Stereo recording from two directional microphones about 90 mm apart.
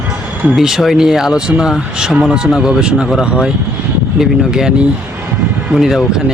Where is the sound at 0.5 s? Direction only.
5° right (ahead or behind).